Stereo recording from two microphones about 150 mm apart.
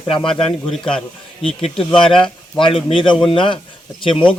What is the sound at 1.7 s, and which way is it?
Speech, 5° left (ahead or behind).